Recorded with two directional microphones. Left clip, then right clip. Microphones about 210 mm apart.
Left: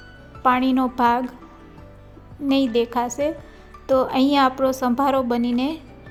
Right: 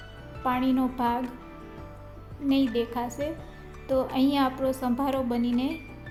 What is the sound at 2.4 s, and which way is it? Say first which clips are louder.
A woman's voice: left 6 dB; 30° left (ahead or behind).